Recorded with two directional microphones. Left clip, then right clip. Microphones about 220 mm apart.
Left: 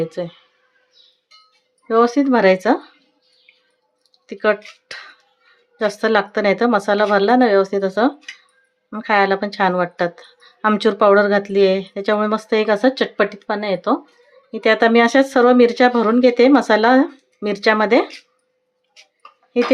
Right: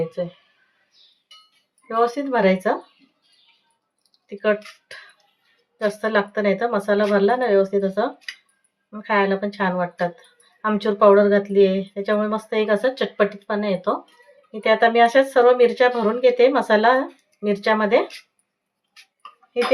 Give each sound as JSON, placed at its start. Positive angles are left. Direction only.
{"t": 0.0, "sound": "speech", "side_deg": 50}
{"t": 1.9, "sound": "speech", "side_deg": 40}
{"t": 4.3, "sound": "speech", "side_deg": 45}